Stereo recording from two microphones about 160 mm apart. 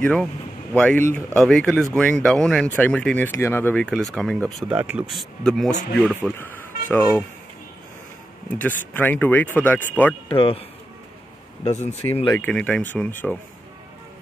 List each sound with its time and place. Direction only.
0.0 s speech: 5° left (ahead or behind)
4.6 s speech: 10° right (ahead or behind)
6.3 s speech: 10° left (ahead or behind)
8.5 s speech: 10° left (ahead or behind)
10.2 s speech: 35° left (ahead or behind)
11.6 s speech: 45° left (ahead or behind)
12.4 s speech: 10° left (ahead or behind)